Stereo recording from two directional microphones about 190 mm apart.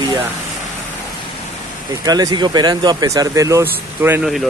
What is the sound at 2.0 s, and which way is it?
Speech, 20° right (ahead or behind).